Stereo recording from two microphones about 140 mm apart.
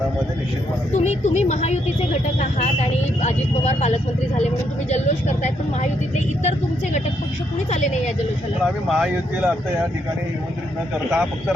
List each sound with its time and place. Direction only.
0.9 s speech: 55° left (ahead or behind)
7.7 s speech: 55° left (ahead or behind)
8.6 s speech: 5° right (ahead or behind)
11.1 s speech: 5° right (ahead or behind)